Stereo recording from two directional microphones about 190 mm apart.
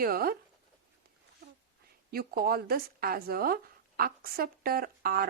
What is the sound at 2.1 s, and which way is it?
Speech, 55° right (ahead or behind).